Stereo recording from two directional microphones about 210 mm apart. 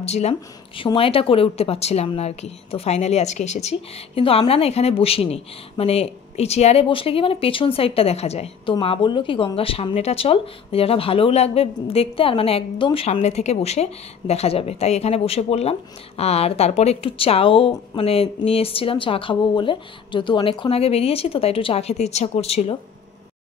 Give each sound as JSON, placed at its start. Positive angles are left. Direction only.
{"t": 0.0, "sound": "speech", "side_deg": 30}